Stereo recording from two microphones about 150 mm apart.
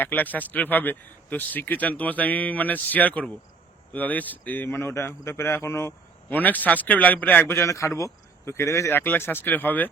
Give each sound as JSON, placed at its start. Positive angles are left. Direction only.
{"t": 0.0, "sound": "speech", "side_deg": 10}